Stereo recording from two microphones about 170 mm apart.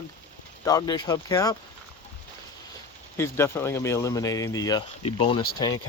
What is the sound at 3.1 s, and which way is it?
Speech, 15° left (ahead or behind).